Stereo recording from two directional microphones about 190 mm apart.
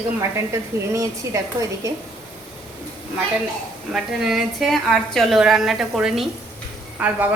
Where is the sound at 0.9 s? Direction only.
15° right (ahead or behind).